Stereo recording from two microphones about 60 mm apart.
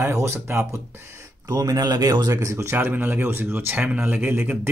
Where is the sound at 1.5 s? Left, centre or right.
Right.